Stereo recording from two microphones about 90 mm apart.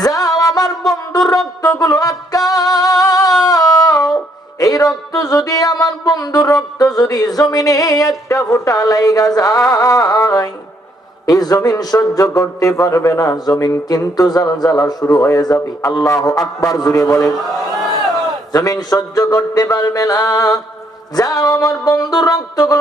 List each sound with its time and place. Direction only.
0.0 s music: 40° left (ahead or behind)
1.8 s music: 40° left (ahead or behind)
3.4 s humming: 40° left (ahead or behind)
4.6 s speech: 40° left (ahead or behind)
18.5 s speech: 40° left (ahead or behind)